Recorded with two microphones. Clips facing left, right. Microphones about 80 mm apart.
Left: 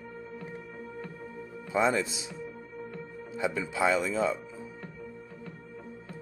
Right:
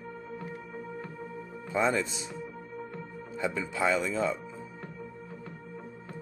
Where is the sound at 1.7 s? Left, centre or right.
Centre.